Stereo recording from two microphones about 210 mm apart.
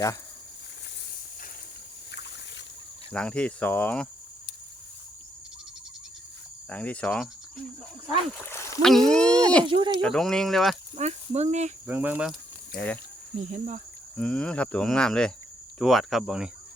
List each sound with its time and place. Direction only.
3.1 s speech: 5° left (ahead or behind)
6.7 s cricket: 5° left (ahead or behind)
8.4 s a sound: 10° left (ahead or behind)
8.9 s speech: 5° left (ahead or behind)
9.6 s speech: 25° right (ahead or behind)
10.0 s speech: centre (ahead or behind)
10.9 s speech: 30° right (ahead or behind)
11.9 s speech: 10° right (ahead or behind)
13.3 s speech: 35° right (ahead or behind)
14.2 s speech: 5° left (ahead or behind)